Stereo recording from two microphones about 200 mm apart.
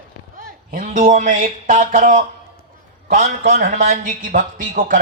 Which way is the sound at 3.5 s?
45° right (ahead or behind).